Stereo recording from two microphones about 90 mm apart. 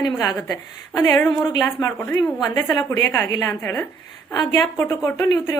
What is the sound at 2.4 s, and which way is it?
Speech, 50° left (ahead or behind).